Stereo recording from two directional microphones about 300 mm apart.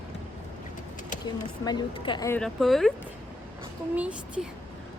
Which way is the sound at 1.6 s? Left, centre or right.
Centre.